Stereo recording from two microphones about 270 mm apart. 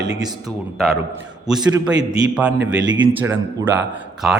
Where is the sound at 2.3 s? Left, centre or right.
Centre.